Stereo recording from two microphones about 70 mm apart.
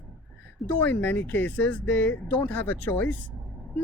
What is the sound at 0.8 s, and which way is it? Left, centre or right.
A woman's voice, left.